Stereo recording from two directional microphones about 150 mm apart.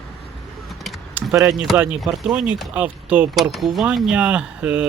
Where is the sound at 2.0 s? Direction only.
Centre (ahead or behind).